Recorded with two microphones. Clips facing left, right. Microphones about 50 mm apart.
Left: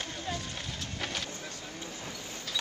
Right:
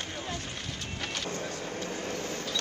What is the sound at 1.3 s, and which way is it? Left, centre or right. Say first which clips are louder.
Vehicle: right 7 dB; right.